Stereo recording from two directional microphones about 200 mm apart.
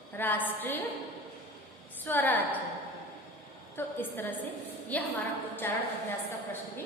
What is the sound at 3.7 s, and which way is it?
A woman's voice, 10° left (ahead or behind).